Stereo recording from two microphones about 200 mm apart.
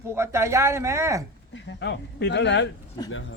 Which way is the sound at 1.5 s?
60° left (ahead or behind).